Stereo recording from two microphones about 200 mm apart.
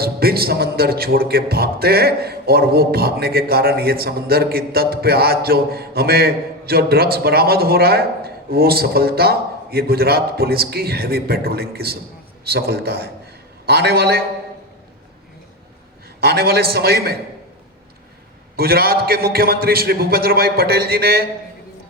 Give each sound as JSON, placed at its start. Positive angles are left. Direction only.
{"t": 0.0, "sound": "a man's voice", "side_deg": -50}
{"t": 16.2, "sound": "a man's voice", "side_deg": -50}
{"t": 18.5, "sound": "a man's voice", "side_deg": -50}